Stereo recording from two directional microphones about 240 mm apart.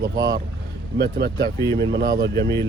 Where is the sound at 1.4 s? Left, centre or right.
Centre.